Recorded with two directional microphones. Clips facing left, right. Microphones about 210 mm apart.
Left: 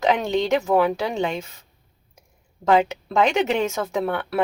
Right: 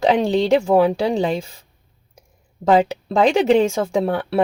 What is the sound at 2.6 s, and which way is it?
Speech, 35° right (ahead or behind).